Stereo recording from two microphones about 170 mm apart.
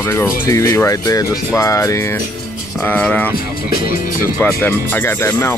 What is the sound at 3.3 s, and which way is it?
Speech, 60° left (ahead or behind).